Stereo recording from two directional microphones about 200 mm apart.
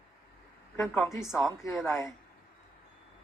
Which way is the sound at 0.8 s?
5° left (ahead or behind).